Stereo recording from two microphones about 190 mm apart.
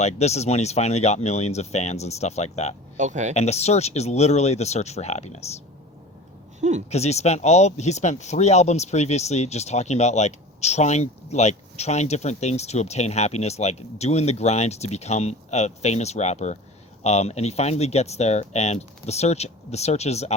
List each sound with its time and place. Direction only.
0.0 s speech: 35° left (ahead or behind)
3.0 s speech: 40° right (ahead or behind)
3.3 s speech: 35° left (ahead or behind)
6.6 s a sound: 40° right (ahead or behind)
6.9 s speech: 35° left (ahead or behind)